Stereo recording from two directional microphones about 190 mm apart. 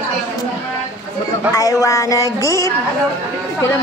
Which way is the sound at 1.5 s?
20° left (ahead or behind).